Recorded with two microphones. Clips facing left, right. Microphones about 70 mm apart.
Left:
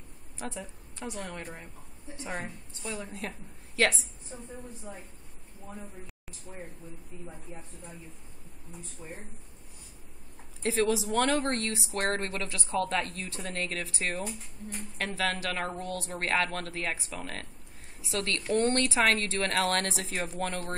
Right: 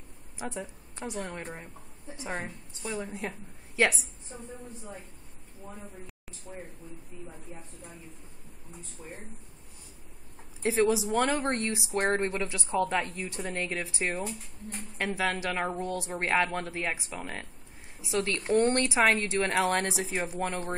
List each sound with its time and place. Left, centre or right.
0.4 s a woman's voice: right
10.6 s speech: centre